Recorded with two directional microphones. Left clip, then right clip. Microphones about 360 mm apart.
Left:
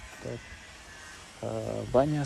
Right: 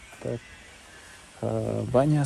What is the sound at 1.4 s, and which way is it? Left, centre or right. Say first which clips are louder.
Speech: right 5 dB; right.